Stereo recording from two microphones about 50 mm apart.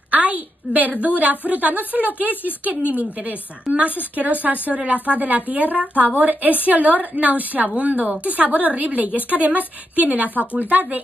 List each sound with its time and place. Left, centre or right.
0.1 s a woman's voice: right